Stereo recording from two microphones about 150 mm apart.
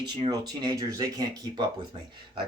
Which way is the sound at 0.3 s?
25° right (ahead or behind).